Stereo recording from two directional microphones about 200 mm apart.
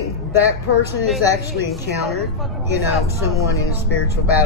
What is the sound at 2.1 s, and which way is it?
Speech, centre (ahead or behind).